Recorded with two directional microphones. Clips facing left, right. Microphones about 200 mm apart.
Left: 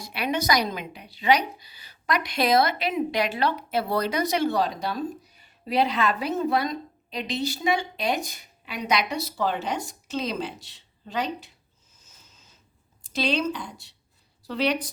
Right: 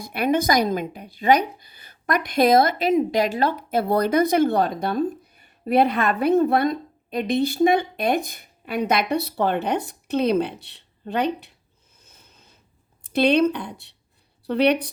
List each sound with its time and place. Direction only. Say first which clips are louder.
0.0 s speech: right 6 dB; 50° right (ahead or behind)
11.9 s a sound: right 4 dB; 60° right (ahead or behind)
13.0 s a woman's voice: right 8 dB; 60° right (ahead or behind)